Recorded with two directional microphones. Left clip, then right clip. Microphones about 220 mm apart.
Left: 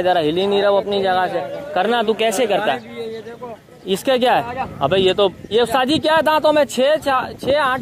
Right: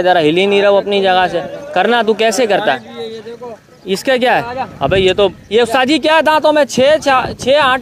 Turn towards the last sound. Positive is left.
turn(degrees=-20)  # may be behind; listen again after turning